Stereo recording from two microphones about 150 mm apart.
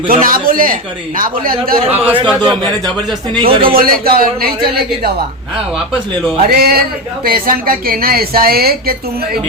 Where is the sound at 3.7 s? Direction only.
75° right (ahead or behind).